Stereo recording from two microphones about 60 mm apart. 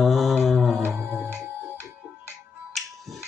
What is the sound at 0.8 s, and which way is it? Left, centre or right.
Music, right.